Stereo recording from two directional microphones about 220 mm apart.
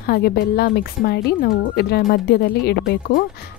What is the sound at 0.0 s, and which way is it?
Speech, 45° left (ahead or behind).